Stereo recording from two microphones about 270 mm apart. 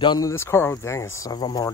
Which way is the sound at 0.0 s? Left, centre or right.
Centre.